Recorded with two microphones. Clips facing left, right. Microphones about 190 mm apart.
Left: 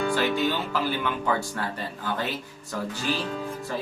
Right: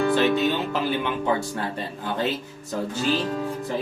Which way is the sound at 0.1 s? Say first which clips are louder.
Right 4 dB; 20° right (ahead or behind).